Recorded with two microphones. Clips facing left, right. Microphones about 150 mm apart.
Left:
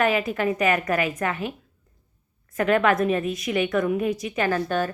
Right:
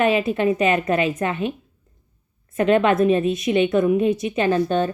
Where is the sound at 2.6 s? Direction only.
25° right (ahead or behind).